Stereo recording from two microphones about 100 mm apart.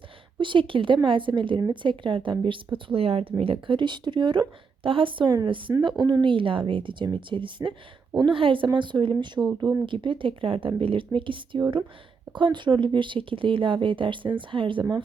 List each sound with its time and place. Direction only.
0.3 s speech: 55° right (ahead or behind)
2.7 s speech: 70° right (ahead or behind)
6.0 s a woman's voice: 45° right (ahead or behind)